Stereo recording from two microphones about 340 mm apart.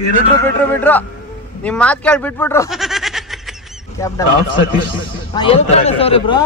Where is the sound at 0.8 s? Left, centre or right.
Centre.